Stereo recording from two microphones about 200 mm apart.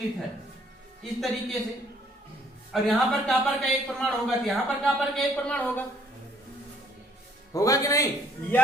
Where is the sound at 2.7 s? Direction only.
Centre (ahead or behind).